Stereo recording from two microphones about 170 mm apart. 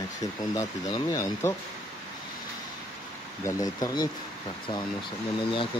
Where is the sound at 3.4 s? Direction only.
20° left (ahead or behind).